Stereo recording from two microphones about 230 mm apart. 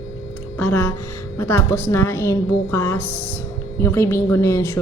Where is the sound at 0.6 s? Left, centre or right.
Centre.